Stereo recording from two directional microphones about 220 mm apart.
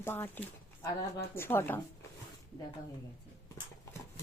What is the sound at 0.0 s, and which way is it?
Speech, 10° left (ahead or behind).